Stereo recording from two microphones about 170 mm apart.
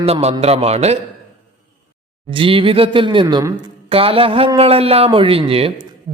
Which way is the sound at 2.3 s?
30° right (ahead or behind).